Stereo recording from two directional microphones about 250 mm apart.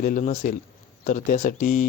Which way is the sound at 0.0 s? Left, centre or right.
Left.